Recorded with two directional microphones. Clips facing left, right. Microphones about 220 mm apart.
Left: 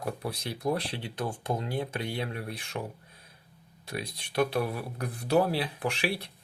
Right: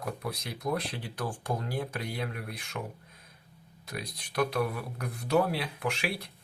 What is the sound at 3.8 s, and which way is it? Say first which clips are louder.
Speech: left 3 dB; 30° left (ahead or behind).